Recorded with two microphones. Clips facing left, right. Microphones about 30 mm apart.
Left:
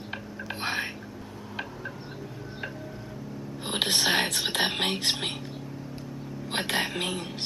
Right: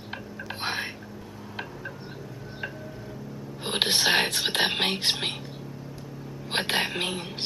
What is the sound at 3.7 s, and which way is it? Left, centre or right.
Speech, right.